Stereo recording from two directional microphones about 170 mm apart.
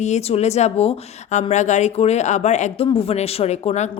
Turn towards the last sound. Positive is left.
turn(degrees=40)  # may be behind; listen again after turning